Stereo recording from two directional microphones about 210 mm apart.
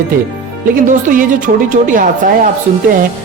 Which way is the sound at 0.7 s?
40° right (ahead or behind).